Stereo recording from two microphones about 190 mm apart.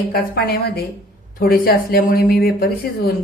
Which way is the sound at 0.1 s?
55° left (ahead or behind).